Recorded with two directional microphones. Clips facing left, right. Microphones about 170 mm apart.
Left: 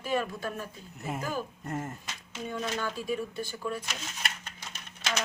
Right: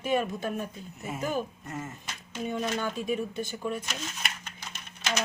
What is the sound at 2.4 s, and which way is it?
Speech, 20° right (ahead or behind).